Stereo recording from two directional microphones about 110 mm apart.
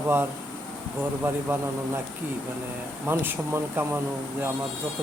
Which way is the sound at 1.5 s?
20° right (ahead or behind).